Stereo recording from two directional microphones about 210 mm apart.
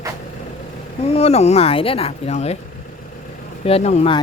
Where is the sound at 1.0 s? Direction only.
30° left (ahead or behind).